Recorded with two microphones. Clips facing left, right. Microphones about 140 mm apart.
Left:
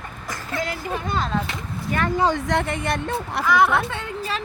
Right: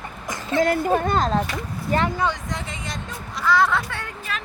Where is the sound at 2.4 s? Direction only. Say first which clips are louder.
Left 9 dB; 65° left (ahead or behind).